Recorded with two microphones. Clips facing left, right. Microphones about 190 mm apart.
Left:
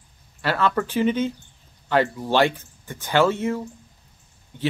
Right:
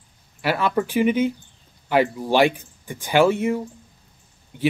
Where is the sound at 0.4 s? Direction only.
10° right (ahead or behind).